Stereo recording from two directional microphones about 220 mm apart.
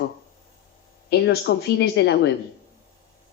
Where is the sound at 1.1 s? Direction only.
50° left (ahead or behind).